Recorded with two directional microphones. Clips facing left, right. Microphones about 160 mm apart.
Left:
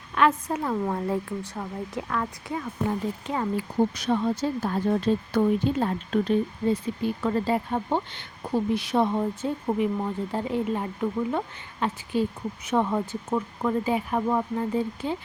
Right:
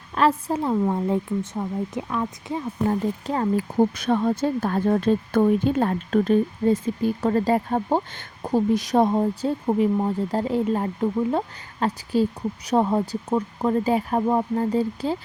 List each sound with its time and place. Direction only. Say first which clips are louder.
0.1 s a woman's voice: right 2 dB; 30° right (ahead or behind)
0.7 s speech: right 5 dB; 15° right (ahead or behind)
3.2 s speech: right 4 dB; 40° right (ahead or behind)
13.3 s speech: right 3 dB; 25° right (ahead or behind)
13.8 s speech: right 4 dB; 40° right (ahead or behind)
14.2 s speech: right 3 dB; 25° right (ahead or behind)
14.6 s speech: right 4 dB; 35° right (ahead or behind)